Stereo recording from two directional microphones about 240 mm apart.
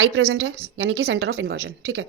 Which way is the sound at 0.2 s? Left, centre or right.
Right.